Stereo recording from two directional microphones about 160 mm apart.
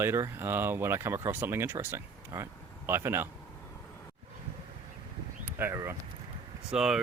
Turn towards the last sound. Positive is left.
turn(degrees=-5)  # may be behind; listen again after turning